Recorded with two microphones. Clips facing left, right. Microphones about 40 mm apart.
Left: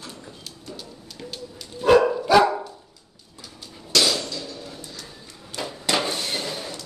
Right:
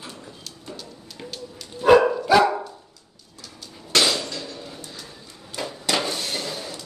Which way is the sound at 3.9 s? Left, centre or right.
Right.